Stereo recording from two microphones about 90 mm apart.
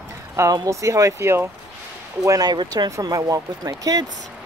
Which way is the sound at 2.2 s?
40° right (ahead or behind).